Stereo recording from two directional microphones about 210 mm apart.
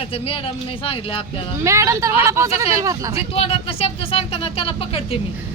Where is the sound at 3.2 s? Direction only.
30° left (ahead or behind).